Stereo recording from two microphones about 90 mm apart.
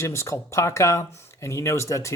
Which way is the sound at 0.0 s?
30° left (ahead or behind).